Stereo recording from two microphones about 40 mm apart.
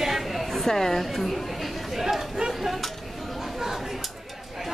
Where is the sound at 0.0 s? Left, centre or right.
Centre.